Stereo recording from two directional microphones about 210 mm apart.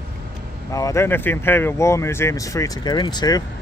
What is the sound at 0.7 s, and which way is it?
Speech, 15° left (ahead or behind).